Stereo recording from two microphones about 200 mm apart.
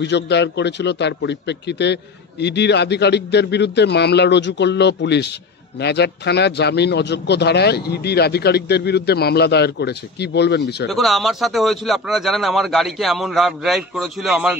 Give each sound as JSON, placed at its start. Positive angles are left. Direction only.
{"t": 0.0, "sound": "a man's voice", "side_deg": 60}
{"t": 10.9, "sound": "a man's voice", "side_deg": 0}